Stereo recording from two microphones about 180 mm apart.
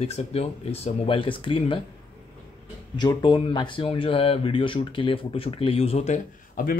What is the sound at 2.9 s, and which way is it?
Speech, 25° left (ahead or behind).